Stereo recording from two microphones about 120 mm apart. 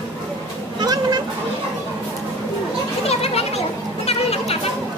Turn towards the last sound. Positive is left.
turn(degrees=55)  # may be behind; listen again after turning